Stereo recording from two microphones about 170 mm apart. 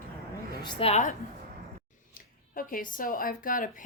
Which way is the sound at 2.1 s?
55° left (ahead or behind).